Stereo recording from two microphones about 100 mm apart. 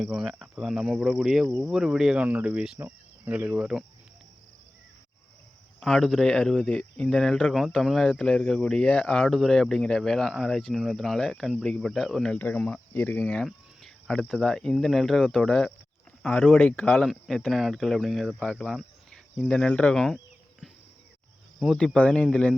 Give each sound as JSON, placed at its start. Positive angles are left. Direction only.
{"t": 0.0, "sound": "speech", "side_deg": 0}
{"t": 2.7, "sound": "cricket", "side_deg": -20}
{"t": 5.8, "sound": "speech", "side_deg": 5}
{"t": 16.9, "sound": "speech", "side_deg": 5}
{"t": 21.8, "sound": "speech", "side_deg": 10}